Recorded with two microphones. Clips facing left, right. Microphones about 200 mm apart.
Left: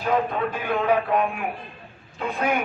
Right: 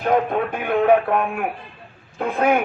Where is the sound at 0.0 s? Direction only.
55° right (ahead or behind).